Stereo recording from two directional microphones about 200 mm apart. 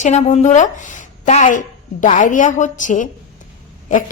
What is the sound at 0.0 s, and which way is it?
A woman's voice, 35° left (ahead or behind).